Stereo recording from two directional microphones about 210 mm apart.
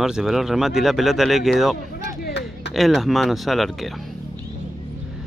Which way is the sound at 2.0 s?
55° left (ahead or behind).